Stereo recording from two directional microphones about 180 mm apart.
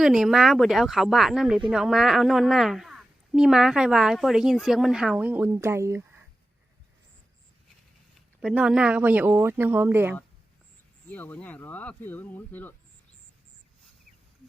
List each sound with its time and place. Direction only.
0.0 s a woman's voice: centre (ahead or behind)
8.4 s speech: 5° right (ahead or behind)
11.1 s speech: 10° left (ahead or behind)